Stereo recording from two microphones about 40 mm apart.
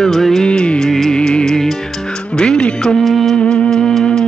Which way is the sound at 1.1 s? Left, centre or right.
Left.